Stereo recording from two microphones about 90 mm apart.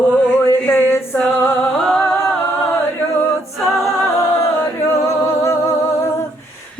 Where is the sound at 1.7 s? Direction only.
10° left (ahead or behind).